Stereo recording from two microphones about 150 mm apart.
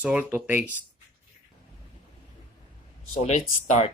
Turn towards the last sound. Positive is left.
turn(degrees=50)  # may be behind; listen again after turning